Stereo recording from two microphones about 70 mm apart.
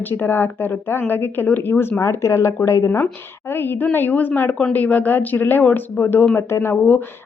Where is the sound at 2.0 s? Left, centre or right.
Left.